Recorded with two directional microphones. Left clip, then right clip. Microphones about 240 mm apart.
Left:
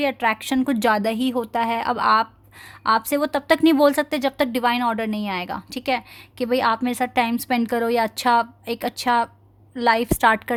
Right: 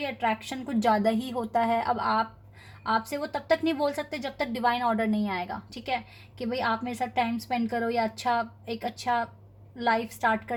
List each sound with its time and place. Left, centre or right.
0.0 s a woman's voice: left